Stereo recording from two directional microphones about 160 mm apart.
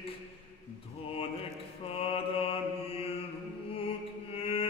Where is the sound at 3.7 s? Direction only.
35° left (ahead or behind).